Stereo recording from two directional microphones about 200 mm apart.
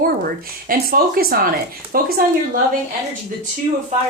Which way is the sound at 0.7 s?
45° right (ahead or behind).